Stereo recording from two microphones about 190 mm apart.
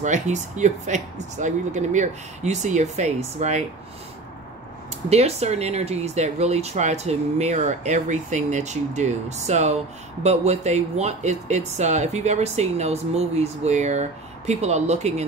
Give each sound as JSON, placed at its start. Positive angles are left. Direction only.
{"t": 0.0, "sound": "speech", "side_deg": -40}
{"t": 5.1, "sound": "speech", "side_deg": -35}